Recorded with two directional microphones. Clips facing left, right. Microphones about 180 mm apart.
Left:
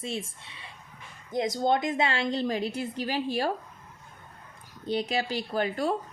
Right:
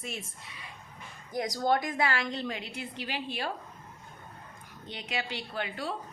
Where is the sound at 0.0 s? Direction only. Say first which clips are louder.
Left 6 dB; 25° left (ahead or behind).